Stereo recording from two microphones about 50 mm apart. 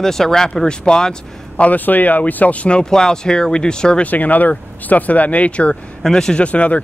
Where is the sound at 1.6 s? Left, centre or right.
Left.